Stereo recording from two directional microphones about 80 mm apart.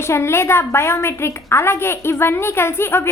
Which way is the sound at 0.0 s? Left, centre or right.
Left.